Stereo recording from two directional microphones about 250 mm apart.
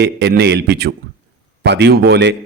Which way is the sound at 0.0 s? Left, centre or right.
Right.